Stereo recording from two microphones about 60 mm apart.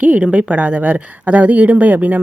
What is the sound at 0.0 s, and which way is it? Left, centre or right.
A woman's voice, right.